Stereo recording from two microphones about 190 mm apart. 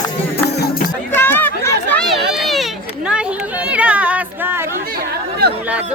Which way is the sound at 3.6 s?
5° right (ahead or behind).